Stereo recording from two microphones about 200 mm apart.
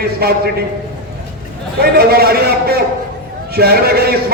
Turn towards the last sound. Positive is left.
turn(degrees=-50)  # may be behind; listen again after turning